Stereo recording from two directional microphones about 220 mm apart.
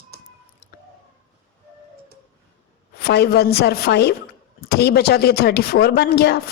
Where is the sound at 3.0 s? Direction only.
45° left (ahead or behind).